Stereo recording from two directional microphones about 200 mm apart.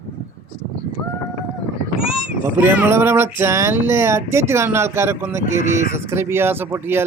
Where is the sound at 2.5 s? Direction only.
10° right (ahead or behind).